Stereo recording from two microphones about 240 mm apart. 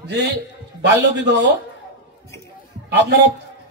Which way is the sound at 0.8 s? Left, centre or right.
Right.